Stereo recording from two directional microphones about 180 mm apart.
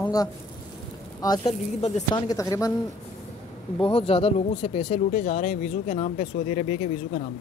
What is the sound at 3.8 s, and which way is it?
Speech, 30° left (ahead or behind).